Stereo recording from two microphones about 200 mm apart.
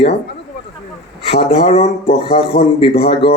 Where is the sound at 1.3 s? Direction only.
30° left (ahead or behind).